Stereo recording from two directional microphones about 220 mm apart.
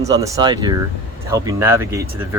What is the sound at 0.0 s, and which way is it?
Speech, 15° right (ahead or behind).